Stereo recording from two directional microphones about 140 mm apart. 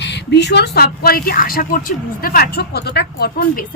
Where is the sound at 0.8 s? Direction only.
90° left.